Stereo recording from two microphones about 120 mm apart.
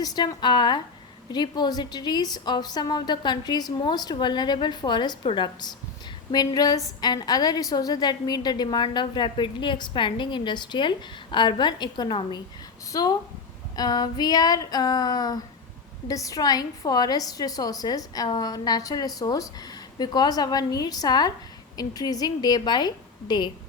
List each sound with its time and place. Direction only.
0.0 s a woman's voice: 35° left (ahead or behind)